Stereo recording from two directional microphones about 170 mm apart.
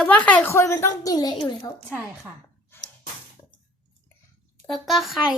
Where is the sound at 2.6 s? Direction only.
10° left (ahead or behind).